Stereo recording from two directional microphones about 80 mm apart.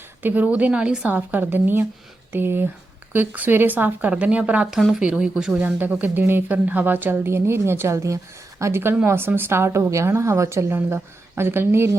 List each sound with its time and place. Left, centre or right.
0.2 s speech: right
4.7 s a woman's voice: centre; by 11.9 s right